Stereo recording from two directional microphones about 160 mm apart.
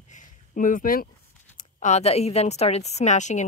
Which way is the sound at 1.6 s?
45° left (ahead or behind).